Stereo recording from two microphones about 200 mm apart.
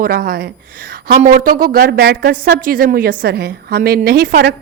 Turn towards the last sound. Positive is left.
turn(degrees=-45)  # may be behind; listen again after turning